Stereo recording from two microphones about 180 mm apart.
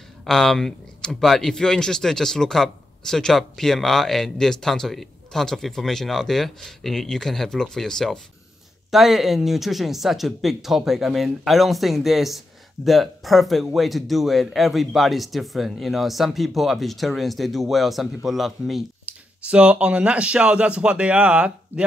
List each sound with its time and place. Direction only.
0.2 s speech: centre (ahead or behind)